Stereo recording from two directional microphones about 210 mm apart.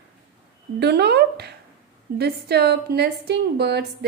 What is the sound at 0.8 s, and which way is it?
A woman's voice, 50° right (ahead or behind).